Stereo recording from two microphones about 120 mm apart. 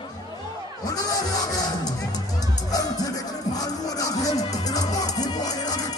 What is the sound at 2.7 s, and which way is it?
Music, 30° left (ahead or behind).